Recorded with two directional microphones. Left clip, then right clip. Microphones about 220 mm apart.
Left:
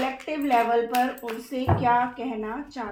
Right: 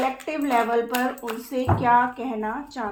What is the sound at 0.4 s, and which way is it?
Speech, 40° right (ahead or behind).